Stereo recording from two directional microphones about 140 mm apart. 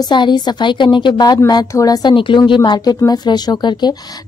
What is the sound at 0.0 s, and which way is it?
Speech, 35° left (ahead or behind).